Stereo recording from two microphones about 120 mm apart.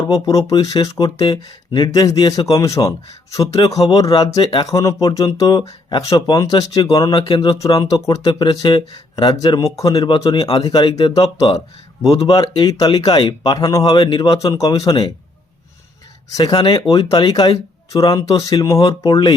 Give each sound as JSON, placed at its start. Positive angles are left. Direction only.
{"t": 0.0, "sound": "speech", "side_deg": 30}
{"t": 7.2, "sound": "speech", "side_deg": 40}
{"t": 7.5, "sound": "speech", "side_deg": 30}
{"t": 12.0, "sound": "speech", "side_deg": 55}
{"t": 12.3, "sound": "speech", "side_deg": 35}
{"t": 13.8, "sound": "speech", "side_deg": 40}
{"t": 16.4, "sound": "speech", "side_deg": 40}